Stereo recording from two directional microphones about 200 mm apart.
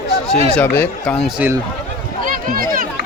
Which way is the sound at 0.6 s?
10° left (ahead or behind).